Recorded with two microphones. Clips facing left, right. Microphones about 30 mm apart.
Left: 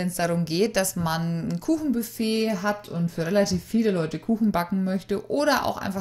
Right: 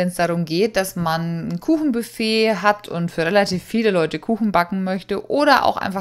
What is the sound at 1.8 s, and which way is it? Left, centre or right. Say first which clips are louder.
Speech: right 5 dB; right.